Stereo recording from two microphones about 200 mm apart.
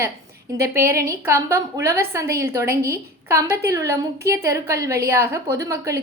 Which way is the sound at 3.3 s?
15° right (ahead or behind).